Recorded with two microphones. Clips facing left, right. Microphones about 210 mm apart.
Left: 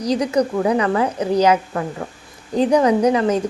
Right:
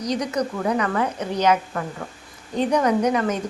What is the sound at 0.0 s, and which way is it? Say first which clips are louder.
A woman's voice: left 6 dB; 30° left (ahead or behind).